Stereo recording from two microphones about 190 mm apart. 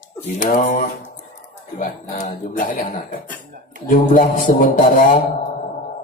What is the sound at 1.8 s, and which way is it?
Music, 45° left (ahead or behind).